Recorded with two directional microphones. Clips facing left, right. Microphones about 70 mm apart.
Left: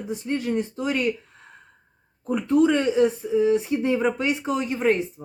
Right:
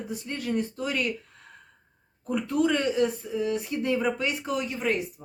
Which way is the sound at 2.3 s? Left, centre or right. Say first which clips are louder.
Left 5 dB; left.